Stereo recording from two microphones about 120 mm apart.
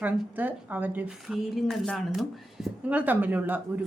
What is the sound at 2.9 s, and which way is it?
Speech, 15° right (ahead or behind).